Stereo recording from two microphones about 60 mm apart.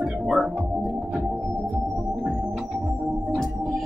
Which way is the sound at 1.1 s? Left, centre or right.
Right.